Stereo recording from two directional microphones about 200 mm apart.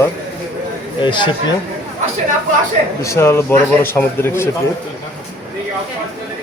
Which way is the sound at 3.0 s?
15° left (ahead or behind).